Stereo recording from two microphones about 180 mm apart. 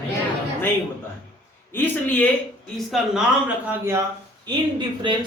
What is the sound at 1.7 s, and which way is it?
Speech, 10° left (ahead or behind).